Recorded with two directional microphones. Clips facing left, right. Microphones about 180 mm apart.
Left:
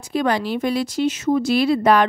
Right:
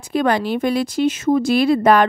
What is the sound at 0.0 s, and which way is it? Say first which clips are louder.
Speech: right 2 dB; 55° right (ahead or behind).